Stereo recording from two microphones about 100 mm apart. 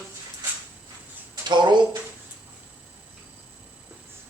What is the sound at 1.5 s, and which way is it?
Speech, 50° right (ahead or behind).